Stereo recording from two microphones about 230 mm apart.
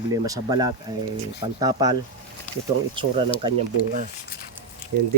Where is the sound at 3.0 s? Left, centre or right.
Right.